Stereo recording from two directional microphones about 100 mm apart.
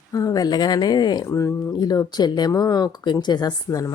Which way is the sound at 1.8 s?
40° left (ahead or behind).